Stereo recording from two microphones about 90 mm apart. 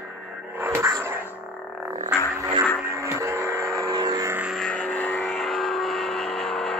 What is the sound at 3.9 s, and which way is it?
Vehicle, 45° right (ahead or behind).